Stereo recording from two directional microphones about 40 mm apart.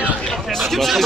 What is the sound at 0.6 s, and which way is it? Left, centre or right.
Speech, centre.